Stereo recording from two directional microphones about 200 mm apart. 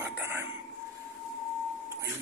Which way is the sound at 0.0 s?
10° right (ahead or behind).